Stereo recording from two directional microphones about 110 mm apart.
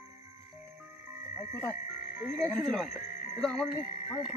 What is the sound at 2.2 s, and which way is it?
Speech, centre (ahead or behind).